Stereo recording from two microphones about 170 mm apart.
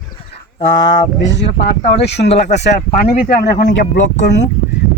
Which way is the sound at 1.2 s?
90° left.